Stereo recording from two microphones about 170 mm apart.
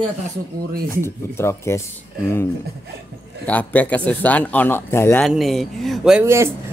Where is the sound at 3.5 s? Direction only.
10° left (ahead or behind).